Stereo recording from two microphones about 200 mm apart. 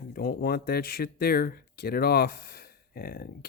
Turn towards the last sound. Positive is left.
turn(degrees=50)  # may be behind; listen again after turning